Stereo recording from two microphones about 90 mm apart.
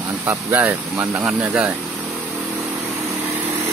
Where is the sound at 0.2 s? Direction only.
25° right (ahead or behind).